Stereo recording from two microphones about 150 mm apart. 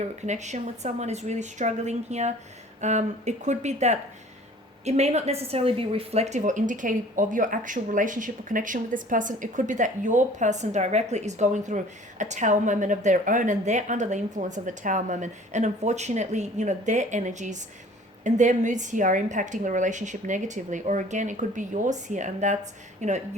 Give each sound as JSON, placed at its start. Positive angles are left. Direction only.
{"t": 0.3, "sound": "a woman's voice", "side_deg": -50}